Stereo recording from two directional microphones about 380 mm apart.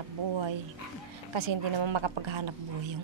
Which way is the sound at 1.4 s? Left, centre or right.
Right.